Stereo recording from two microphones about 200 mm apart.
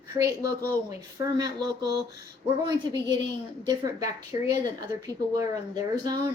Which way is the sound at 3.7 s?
20° right (ahead or behind).